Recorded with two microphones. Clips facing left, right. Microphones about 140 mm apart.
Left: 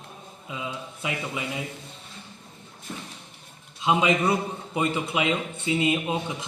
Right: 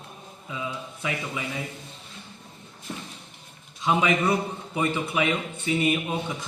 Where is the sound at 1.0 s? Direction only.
20° left (ahead or behind).